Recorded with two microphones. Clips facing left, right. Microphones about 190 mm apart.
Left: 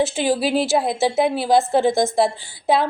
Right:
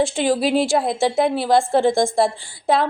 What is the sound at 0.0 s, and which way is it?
A woman's voice, 5° left (ahead or behind).